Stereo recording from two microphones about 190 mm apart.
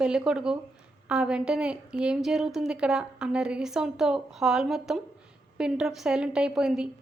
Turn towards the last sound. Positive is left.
turn(degrees=-5)  # may be behind; listen again after turning